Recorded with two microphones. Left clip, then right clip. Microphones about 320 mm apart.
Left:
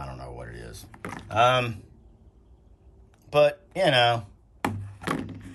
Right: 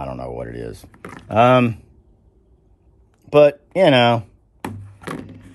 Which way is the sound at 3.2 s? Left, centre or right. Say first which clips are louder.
Right 8 dB; right.